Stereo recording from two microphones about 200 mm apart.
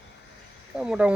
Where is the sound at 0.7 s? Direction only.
5° right (ahead or behind).